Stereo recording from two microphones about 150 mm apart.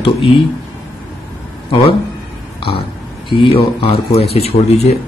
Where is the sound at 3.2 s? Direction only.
35° left (ahead or behind).